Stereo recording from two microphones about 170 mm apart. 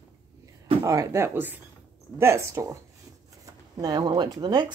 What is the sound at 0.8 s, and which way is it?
Speech, 20° right (ahead or behind).